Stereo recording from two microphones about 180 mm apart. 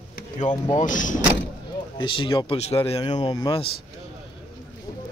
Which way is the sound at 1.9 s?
25° left (ahead or behind).